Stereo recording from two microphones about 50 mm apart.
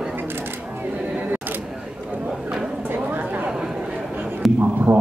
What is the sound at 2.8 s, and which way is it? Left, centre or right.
Chatter, right.